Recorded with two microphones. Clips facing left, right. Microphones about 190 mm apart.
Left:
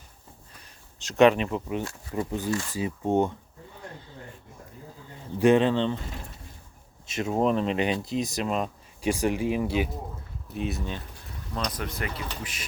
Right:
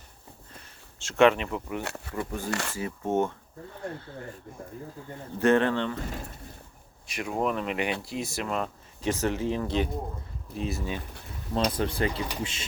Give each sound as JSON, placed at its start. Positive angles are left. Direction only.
{"t": 1.0, "sound": "speech", "side_deg": 20}
{"t": 1.8, "sound": "speech", "side_deg": -70}
{"t": 2.7, "sound": "speech", "side_deg": 15}
{"t": 5.4, "sound": "speech", "side_deg": 15}
{"t": 7.1, "sound": "speech", "side_deg": 25}
{"t": 11.5, "sound": "speech", "side_deg": -30}